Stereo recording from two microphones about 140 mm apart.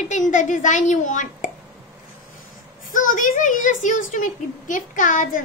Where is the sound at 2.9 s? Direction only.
70° left (ahead or behind).